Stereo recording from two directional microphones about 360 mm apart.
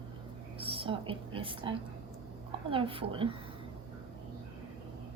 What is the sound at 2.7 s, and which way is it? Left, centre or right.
Speech, centre.